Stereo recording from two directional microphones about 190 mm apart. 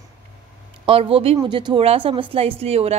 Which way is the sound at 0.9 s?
30° right (ahead or behind).